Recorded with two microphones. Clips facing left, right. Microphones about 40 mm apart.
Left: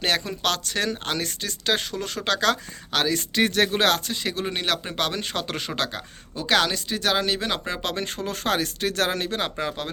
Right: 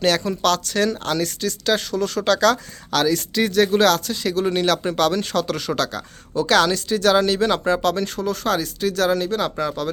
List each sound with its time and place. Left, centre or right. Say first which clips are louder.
0.0 s speech: right 5 dB; centre
6.4 s speech: right 5 dB; centre
7.8 s speech: right 7 dB; left